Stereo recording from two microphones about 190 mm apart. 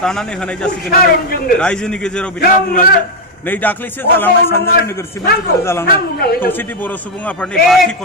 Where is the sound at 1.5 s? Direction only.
5° left (ahead or behind).